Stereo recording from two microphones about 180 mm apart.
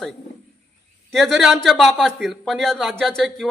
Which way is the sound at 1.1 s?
Centre (ahead or behind).